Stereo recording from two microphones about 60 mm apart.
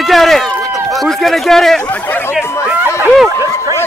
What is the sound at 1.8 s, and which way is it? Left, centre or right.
Speech, left.